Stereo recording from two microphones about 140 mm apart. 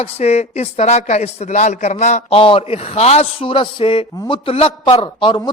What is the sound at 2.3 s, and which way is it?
A man's voice, 40° left (ahead or behind).